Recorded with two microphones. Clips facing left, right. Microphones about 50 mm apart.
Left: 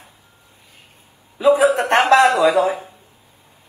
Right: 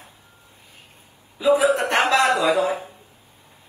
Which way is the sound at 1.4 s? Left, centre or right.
Left.